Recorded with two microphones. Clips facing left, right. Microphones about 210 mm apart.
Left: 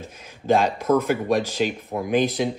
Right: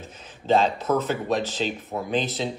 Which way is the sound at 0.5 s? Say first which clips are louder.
Left 2 dB; 10° left (ahead or behind).